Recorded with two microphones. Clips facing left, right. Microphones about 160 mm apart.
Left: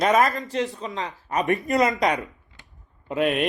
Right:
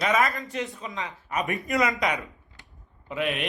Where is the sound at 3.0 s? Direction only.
45° left (ahead or behind).